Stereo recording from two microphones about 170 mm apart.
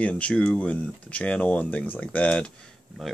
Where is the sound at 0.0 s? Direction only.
5° left (ahead or behind).